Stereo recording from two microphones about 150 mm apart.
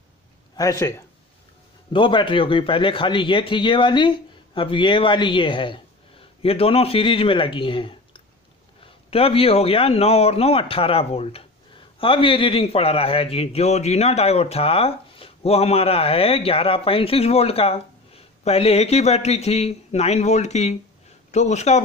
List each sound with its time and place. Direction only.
0.6 s speech: 20° left (ahead or behind)
1.9 s a man's voice: 35° left (ahead or behind)